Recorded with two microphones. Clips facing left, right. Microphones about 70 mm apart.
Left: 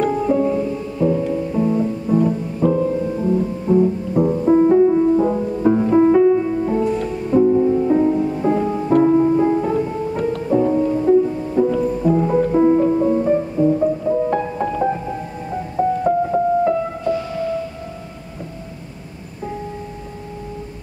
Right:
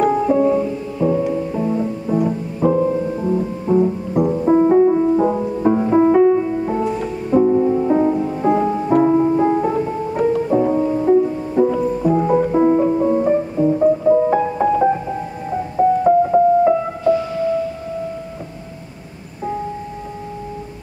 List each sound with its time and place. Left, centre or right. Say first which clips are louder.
0.0 s music: right 2 dB; centre
8.1 s music: right 1 dB; centre
14.0 s music: right 5 dB; right
14.3 s music: right 5 dB; centre